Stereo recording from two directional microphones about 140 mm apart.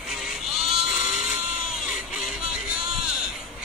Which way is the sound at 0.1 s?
5° right (ahead or behind).